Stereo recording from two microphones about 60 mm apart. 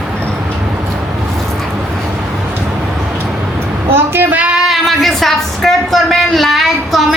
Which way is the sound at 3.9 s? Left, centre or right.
Right.